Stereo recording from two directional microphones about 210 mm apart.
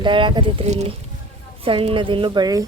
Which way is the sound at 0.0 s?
20° right (ahead or behind).